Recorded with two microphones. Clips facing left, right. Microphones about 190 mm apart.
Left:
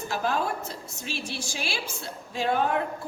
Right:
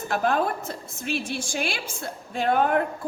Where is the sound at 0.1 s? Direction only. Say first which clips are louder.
Right 4 dB; 55° right (ahead or behind).